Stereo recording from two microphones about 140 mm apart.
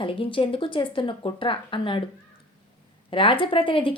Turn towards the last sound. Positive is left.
turn(degrees=40)  # may be behind; listen again after turning